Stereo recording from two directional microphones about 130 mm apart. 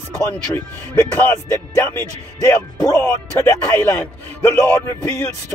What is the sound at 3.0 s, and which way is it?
A man's voice, 15° left (ahead or behind).